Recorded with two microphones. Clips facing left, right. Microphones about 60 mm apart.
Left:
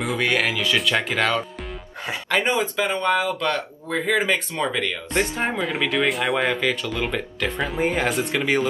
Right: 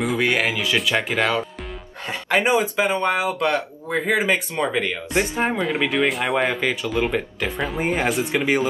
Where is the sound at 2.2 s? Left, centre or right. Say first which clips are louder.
Right 3 dB; centre.